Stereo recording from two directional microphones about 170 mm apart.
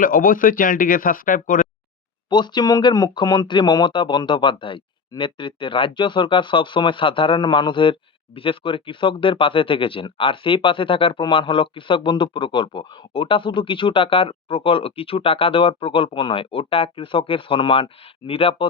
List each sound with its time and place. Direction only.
0.0 s speech: 55° left (ahead or behind)
2.3 s speech: 25° left (ahead or behind)